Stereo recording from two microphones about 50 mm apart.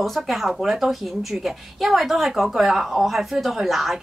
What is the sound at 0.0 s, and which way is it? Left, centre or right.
A woman's voice, centre.